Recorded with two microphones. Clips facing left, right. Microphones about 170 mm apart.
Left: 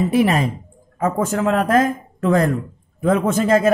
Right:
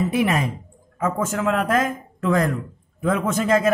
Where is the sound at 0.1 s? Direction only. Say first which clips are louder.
Left 4 dB; 35° left (ahead or behind).